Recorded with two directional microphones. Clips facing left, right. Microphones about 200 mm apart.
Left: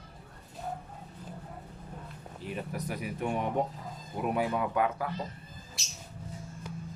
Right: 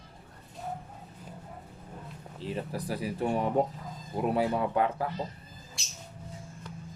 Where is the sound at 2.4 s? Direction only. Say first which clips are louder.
Right 2 dB; 30° right (ahead or behind).